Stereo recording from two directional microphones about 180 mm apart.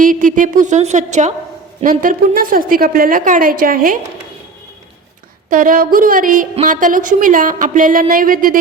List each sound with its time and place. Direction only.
0.0 s a woman's voice: 50° right (ahead or behind)
5.5 s a woman's voice: 50° right (ahead or behind)